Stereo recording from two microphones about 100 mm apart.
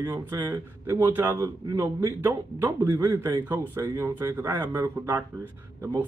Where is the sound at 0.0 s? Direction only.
25° right (ahead or behind).